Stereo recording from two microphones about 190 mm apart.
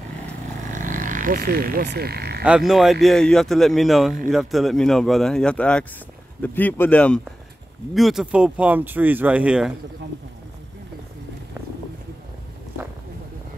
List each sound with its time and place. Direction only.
0.7 s frog: 45° right (ahead or behind)
2.4 s speech: 5° right (ahead or behind)